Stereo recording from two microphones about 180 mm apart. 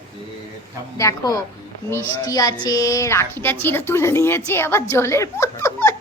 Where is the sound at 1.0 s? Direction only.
15° left (ahead or behind).